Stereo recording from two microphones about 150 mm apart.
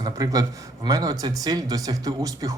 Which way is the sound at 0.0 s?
25° right (ahead or behind).